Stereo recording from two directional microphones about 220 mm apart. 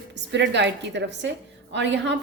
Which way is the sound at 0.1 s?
50° right (ahead or behind).